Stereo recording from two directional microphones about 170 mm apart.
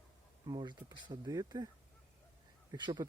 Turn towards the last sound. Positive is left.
turn(degrees=-25)  # may be behind; listen again after turning